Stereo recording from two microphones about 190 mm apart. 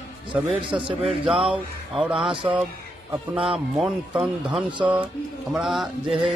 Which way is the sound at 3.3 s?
5° right (ahead or behind).